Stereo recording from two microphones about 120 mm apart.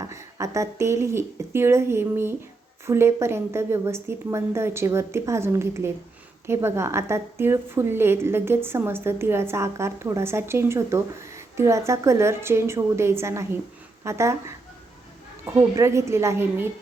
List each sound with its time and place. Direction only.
0.0 s a woman's voice: 25° right (ahead or behind)